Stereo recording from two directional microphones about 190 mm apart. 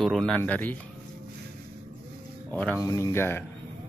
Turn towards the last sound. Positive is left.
turn(degrees=10)  # may be behind; listen again after turning